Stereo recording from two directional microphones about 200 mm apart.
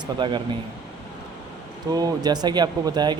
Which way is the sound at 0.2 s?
20° right (ahead or behind).